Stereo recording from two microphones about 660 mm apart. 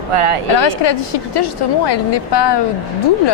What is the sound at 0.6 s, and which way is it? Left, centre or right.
A woman's voice, left.